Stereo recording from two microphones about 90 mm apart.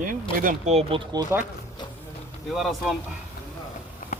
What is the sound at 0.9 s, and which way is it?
Speech, 90° right.